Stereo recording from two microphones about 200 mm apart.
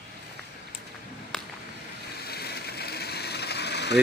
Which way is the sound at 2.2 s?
50° left (ahead or behind).